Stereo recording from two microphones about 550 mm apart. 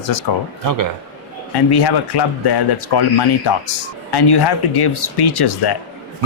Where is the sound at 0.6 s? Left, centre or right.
Right.